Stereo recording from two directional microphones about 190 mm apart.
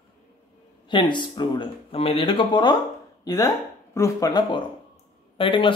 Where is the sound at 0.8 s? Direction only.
25° left (ahead or behind).